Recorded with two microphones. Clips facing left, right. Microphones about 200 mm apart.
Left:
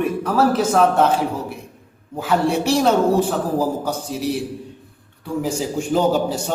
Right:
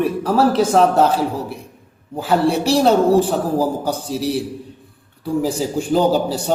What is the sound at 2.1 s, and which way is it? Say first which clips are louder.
A man's voice: right 2 dB; 35° right (ahead or behind).